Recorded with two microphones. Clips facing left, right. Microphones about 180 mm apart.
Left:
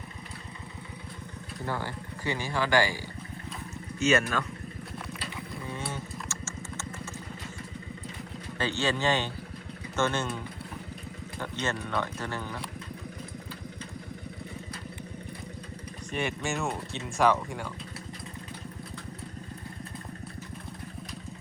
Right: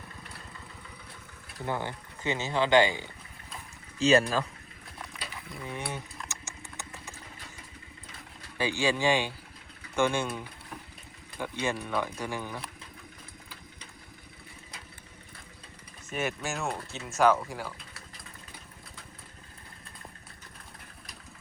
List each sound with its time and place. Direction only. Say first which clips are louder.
1.6 s speech: right 1 dB; 20° right (ahead or behind)
4.0 s speech: right 2 dB; 35° right (ahead or behind)
5.2 s typing: left 3 dB; 20° right (ahead or behind)
8.5 s speech: right 1 dB; 10° right (ahead or behind)
16.1 s speech: left 1 dB; centre (ahead or behind)